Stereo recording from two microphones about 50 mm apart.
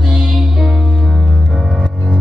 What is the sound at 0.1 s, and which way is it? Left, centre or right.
Music, centre.